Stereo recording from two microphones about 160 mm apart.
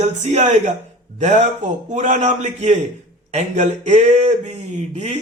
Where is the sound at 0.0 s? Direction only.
45° right (ahead or behind).